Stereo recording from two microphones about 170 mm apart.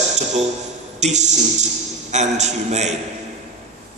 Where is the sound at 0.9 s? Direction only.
45° right (ahead or behind).